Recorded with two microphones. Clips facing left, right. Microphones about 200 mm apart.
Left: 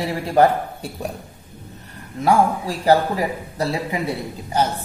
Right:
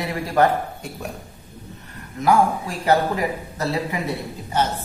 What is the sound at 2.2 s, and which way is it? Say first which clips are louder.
Speech: left 1 dB; 35° left (ahead or behind).